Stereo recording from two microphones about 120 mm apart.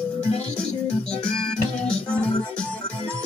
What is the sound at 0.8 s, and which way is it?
Music, 10° left (ahead or behind).